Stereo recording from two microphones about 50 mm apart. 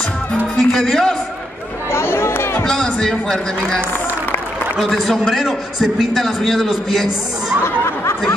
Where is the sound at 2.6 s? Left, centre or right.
Centre.